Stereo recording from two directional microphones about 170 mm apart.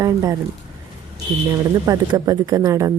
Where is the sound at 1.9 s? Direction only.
20° right (ahead or behind).